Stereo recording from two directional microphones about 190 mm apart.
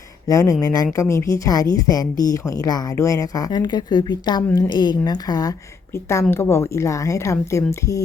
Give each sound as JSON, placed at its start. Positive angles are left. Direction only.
{"t": 0.3, "sound": "a woman's voice", "side_deg": 15}